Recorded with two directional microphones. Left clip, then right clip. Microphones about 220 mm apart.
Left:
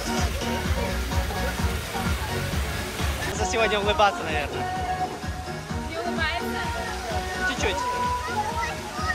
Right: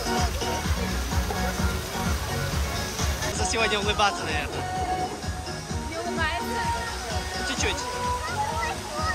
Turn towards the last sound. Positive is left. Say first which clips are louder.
# left 1 dB
turn(degrees=-10)  # may be behind; listen again after turning